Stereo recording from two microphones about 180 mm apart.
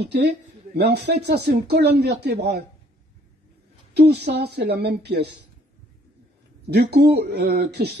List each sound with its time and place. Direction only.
0.0 s speech: 70° right (ahead or behind)
3.9 s speech: 65° right (ahead or behind)
6.7 s speech: 65° right (ahead or behind)